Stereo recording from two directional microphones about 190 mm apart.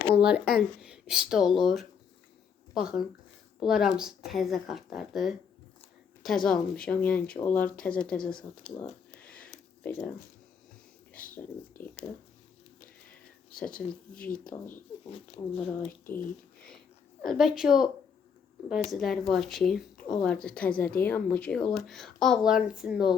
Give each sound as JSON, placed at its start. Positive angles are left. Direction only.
{"t": 0.1, "sound": "speech", "side_deg": -5}
{"t": 9.2, "sound": "a sound", "side_deg": 5}
{"t": 11.1, "sound": "a sound", "side_deg": 45}
{"t": 13.6, "sound": "speech", "side_deg": 5}
{"t": 15.1, "sound": "speech", "side_deg": 30}
{"t": 17.2, "sound": "speech", "side_deg": 0}
{"t": 18.9, "sound": "speech", "side_deg": 0}